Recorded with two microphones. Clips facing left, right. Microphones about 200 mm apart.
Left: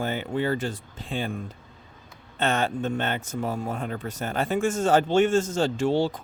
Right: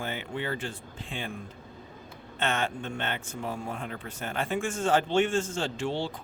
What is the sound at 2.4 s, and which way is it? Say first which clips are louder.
Speech: left 5 dB; 35° left (ahead or behind).